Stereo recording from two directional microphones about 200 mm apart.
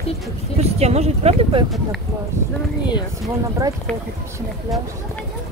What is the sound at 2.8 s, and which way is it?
Speech, 20° left (ahead or behind).